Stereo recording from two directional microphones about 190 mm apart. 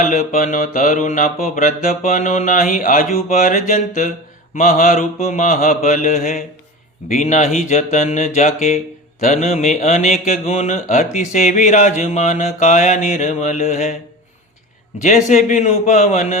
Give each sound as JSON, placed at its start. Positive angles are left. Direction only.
{"t": 0.0, "sound": "mantra", "side_deg": 40}
{"t": 15.0, "sound": "mantra", "side_deg": 40}